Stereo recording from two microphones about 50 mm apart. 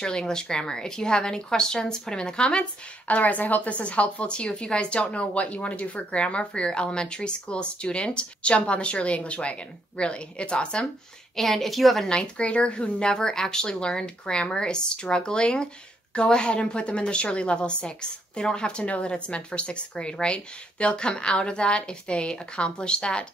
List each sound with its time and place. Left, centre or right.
0.0 s speech: centre
3.1 s a woman's voice: left
11.3 s a woman's voice: centre
12.1 s a woman's voice: left